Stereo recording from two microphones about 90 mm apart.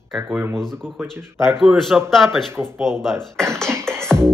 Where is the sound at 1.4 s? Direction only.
Centre (ahead or behind).